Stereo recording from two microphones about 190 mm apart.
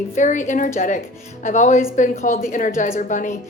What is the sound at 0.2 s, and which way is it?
A woman's voice, 40° left (ahead or behind).